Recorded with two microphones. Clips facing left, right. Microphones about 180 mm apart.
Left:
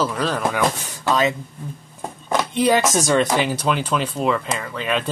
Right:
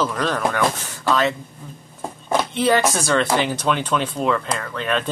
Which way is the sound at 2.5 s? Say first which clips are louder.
Left 2 dB; 15° left (ahead or behind).